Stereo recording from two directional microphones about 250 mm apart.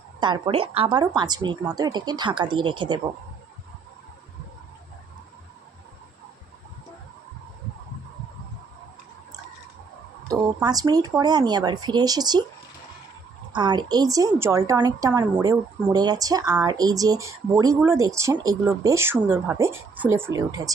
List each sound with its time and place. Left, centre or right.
0.2 s a woman's voice: centre
10.2 s a woman's voice: centre
13.5 s a woman's voice: centre